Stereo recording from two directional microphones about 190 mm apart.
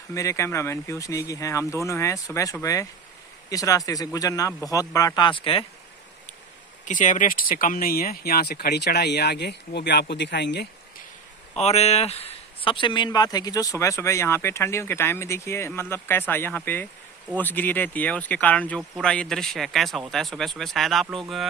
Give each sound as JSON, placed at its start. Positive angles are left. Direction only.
{"t": 0.1, "sound": "speech", "side_deg": 15}
{"t": 6.8, "sound": "speech", "side_deg": 40}
{"t": 11.5, "sound": "speech", "side_deg": 35}